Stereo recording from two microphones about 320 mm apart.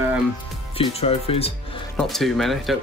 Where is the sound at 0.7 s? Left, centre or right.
Centre.